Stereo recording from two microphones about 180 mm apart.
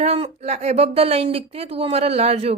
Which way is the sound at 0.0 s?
35° right (ahead or behind).